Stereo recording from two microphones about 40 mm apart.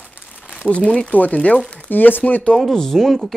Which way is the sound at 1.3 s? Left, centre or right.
Left.